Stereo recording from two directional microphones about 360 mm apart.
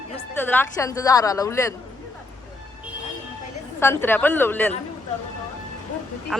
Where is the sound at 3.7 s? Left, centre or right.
Centre.